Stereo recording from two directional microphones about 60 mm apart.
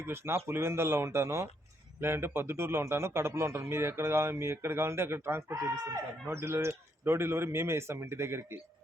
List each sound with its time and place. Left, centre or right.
0.0 s a man's voice: right